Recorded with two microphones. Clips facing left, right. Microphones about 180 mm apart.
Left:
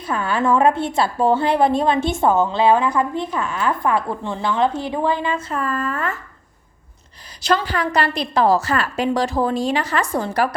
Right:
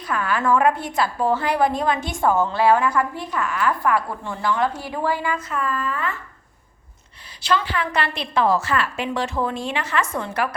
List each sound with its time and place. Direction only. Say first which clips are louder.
0.0 s a woman's voice: left 2 dB; 25° left (ahead or behind); by 6.1 s 45° left (ahead or behind)
7.4 s a woman's voice: left 3 dB; 40° left (ahead or behind)